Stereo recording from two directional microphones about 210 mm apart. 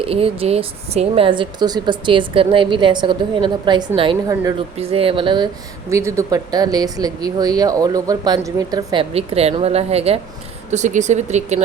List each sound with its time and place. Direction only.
0.0 s a woman's voice: 25° right (ahead or behind)